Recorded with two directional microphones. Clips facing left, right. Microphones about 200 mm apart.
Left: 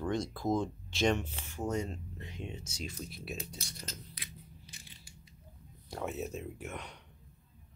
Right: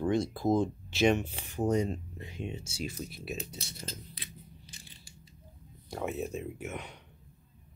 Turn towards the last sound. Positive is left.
turn(degrees=-5)  # may be behind; listen again after turning